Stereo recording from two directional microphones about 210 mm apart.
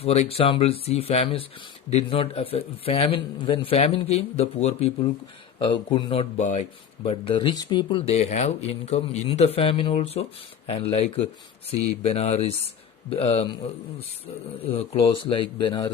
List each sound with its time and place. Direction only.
0.0 s speech: 30° left (ahead or behind)
14.7 s speech: 25° left (ahead or behind)